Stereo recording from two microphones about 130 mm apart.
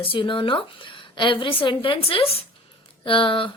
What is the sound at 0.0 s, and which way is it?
A woman's voice, 40° left (ahead or behind).